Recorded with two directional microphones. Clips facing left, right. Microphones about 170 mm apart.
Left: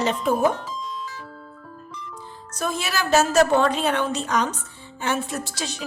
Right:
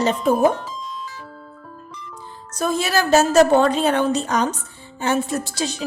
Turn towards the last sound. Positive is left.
turn(degrees=-35)  # may be behind; listen again after turning